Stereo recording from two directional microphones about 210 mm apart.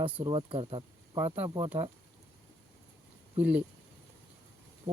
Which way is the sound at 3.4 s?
5° right (ahead or behind).